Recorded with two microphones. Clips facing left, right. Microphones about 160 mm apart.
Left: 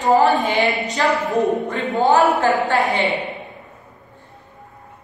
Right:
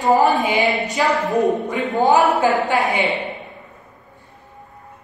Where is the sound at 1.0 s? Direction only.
15° right (ahead or behind).